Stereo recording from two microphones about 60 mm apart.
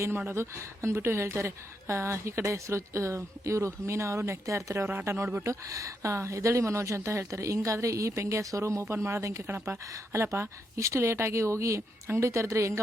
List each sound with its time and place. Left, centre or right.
0.3 s a woman's voice: right
5.6 s a woman's voice: right